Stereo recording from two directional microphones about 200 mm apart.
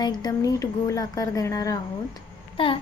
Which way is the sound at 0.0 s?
20° left (ahead or behind).